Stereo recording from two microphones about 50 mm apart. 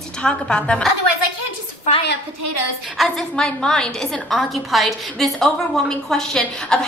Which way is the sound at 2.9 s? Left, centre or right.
Centre.